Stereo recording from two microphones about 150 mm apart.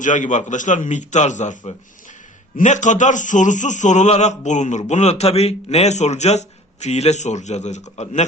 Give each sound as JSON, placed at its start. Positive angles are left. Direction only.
{"t": 0.0, "sound": "a man's voice", "side_deg": 55}